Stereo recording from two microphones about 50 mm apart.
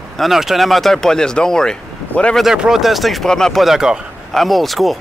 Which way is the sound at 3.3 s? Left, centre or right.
Centre.